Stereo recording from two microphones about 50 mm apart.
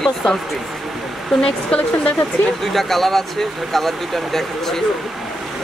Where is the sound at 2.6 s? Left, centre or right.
Centre.